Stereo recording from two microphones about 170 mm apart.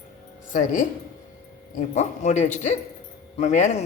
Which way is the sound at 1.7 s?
45° left (ahead or behind).